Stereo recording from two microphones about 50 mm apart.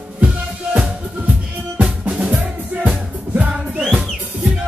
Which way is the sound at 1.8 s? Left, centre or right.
Right.